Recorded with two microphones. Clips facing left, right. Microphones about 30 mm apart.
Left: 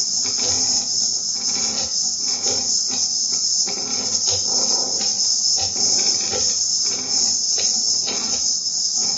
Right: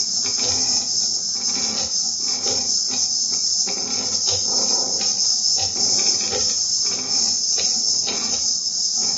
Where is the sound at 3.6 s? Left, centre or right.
Centre.